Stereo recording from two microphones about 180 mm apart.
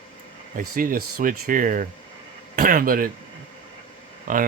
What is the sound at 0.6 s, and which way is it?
Speech, 50° right (ahead or behind).